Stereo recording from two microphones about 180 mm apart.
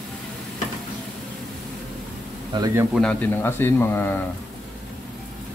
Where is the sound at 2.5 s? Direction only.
25° right (ahead or behind).